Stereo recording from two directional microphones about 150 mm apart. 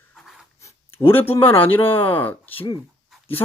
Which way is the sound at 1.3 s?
35° left (ahead or behind).